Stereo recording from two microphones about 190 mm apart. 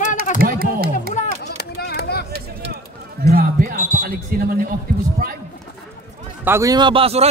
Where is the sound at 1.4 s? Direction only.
60° left (ahead or behind).